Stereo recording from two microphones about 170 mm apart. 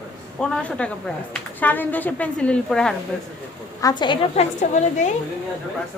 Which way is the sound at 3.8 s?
25° left (ahead or behind).